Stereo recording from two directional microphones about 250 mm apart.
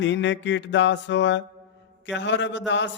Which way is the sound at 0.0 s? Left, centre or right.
Left.